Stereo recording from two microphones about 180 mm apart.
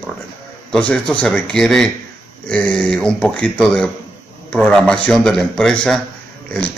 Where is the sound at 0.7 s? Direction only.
5° left (ahead or behind).